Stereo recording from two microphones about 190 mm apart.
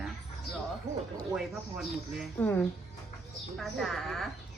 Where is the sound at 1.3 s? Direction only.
Centre (ahead or behind).